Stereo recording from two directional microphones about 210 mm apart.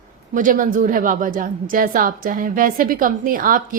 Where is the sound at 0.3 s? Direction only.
40° right (ahead or behind).